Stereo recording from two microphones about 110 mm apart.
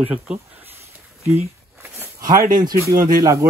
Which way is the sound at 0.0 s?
10° right (ahead or behind).